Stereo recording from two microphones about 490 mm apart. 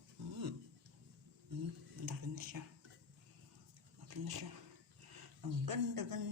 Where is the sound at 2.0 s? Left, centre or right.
Right.